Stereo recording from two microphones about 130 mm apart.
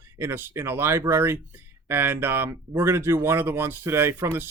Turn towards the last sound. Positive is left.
turn(degrees=-20)  # may be behind; listen again after turning